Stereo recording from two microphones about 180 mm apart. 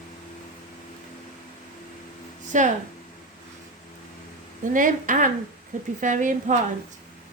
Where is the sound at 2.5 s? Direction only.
45° right (ahead or behind).